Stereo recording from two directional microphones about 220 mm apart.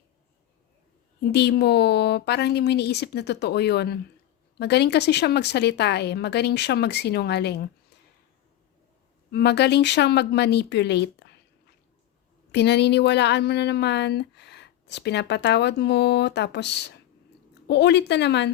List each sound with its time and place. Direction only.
1.2 s speech: 50° left (ahead or behind)
9.3 s speech: 50° left (ahead or behind)
12.5 s speech: 50° left (ahead or behind)